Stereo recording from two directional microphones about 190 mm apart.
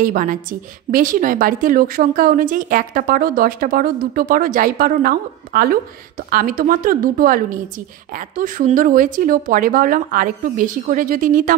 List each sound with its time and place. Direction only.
0.0 s a woman's voice: 45° right (ahead or behind)